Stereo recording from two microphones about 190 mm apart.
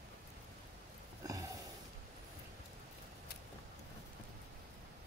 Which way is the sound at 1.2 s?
15° right (ahead or behind).